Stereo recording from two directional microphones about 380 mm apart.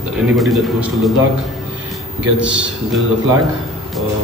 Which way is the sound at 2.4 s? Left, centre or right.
Centre.